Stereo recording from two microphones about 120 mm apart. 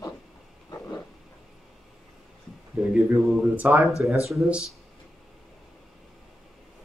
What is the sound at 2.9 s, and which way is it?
Mantra, 5° right (ahead or behind).